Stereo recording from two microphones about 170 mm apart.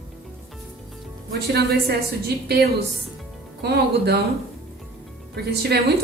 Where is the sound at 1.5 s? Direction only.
70° right (ahead or behind).